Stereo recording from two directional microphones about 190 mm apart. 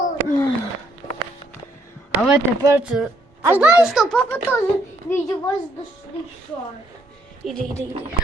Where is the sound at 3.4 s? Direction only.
10° right (ahead or behind).